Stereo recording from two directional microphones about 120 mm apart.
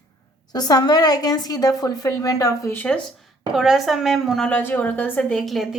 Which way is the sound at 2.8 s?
10° left (ahead or behind).